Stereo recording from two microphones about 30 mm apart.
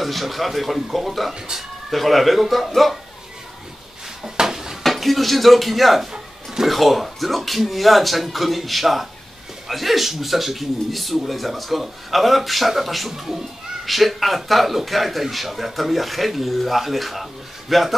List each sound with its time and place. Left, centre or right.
0.0 s a man's voice: centre
4.2 s a sound: centre
5.0 s a man's voice: centre